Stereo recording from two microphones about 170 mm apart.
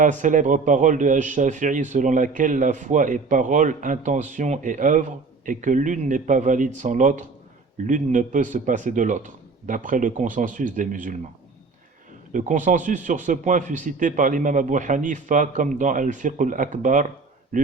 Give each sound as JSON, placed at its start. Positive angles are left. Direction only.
{"t": 0.0, "sound": "a man's voice", "side_deg": -50}
{"t": 12.3, "sound": "a man's voice", "side_deg": -50}